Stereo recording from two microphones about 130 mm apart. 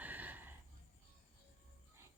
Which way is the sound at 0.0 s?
15° right (ahead or behind).